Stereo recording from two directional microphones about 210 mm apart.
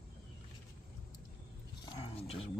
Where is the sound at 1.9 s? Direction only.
30° left (ahead or behind).